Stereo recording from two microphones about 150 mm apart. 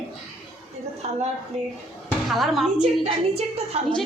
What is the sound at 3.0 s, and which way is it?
Speech, 45° right (ahead or behind).